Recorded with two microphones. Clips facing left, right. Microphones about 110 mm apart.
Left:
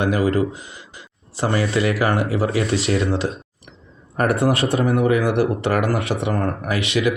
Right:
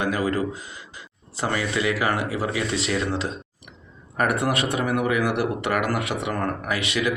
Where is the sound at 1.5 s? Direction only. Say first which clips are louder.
Left 4 dB; 30° left (ahead or behind).